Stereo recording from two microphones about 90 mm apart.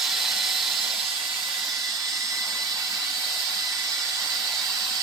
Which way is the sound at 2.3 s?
40° right (ahead or behind).